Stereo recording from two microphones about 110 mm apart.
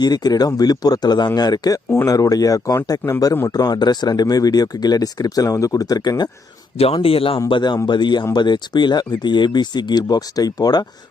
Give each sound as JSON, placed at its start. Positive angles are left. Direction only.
{"t": 0.0, "sound": "speech", "side_deg": 35}
{"t": 6.9, "sound": "speech", "side_deg": 60}
{"t": 7.3, "sound": "speech", "side_deg": 45}